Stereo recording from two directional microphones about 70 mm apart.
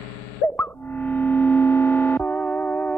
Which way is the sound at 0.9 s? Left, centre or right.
Left.